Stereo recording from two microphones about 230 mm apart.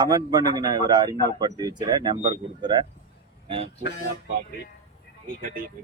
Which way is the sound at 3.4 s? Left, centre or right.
Right.